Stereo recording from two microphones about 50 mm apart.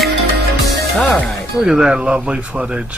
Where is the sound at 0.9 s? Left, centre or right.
Centre.